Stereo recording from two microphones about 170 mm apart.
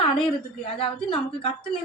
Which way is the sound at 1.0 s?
30° left (ahead or behind).